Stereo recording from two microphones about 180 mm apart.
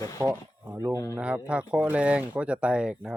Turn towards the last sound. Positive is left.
turn(degrees=-5)  # may be behind; listen again after turning